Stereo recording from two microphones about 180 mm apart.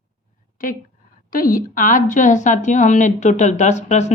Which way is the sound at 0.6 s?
50° left (ahead or behind).